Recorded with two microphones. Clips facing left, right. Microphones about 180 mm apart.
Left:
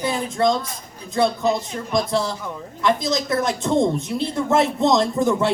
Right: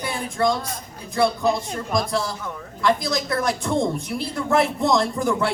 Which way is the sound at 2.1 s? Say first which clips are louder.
Left 3 dB; 25° left (ahead or behind).